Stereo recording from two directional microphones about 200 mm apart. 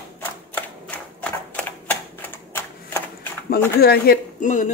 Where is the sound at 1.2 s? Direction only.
5° left (ahead or behind).